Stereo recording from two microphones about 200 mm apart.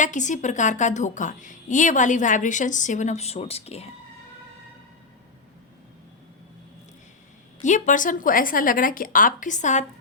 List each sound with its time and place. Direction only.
0.0 s a woman's voice: 40° left (ahead or behind)
7.6 s speech: 40° left (ahead or behind)